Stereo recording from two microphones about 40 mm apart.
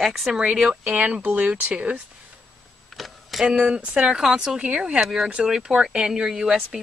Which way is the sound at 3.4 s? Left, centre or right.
Right.